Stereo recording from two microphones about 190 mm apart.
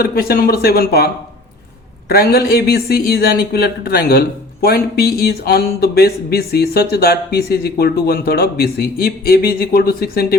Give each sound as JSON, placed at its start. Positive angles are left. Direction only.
{"t": 0.0, "sound": "speech", "side_deg": 50}